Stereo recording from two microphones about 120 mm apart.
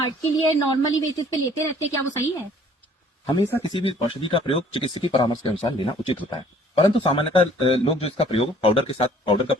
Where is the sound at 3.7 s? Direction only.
45° left (ahead or behind).